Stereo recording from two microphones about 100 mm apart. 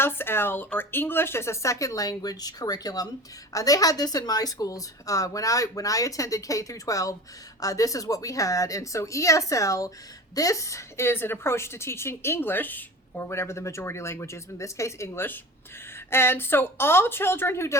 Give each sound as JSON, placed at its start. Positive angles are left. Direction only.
{"t": 0.0, "sound": "a woman's voice", "side_deg": 20}